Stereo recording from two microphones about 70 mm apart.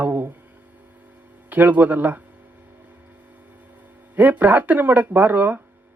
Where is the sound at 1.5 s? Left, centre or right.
Right.